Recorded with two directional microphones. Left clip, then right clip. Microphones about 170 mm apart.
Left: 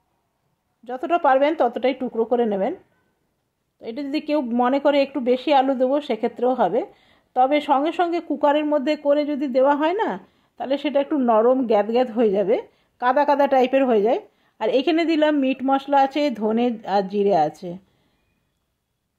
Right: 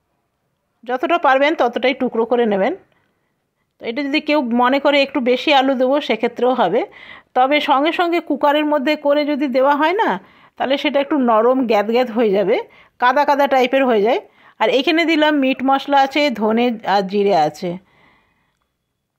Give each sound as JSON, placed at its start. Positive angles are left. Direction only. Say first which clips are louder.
{"t": 0.8, "sound": "a woman's voice", "louder": "right 4 dB", "side_deg": -20}
{"t": 3.7, "sound": "a woman's voice", "louder": "right 7 dB", "side_deg": -20}